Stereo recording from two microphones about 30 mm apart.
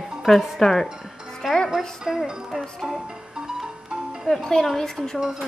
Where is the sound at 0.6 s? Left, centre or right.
Centre.